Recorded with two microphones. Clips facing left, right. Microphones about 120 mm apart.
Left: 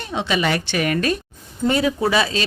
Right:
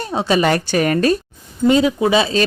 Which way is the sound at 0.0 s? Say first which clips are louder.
Right 5 dB; 40° right (ahead or behind).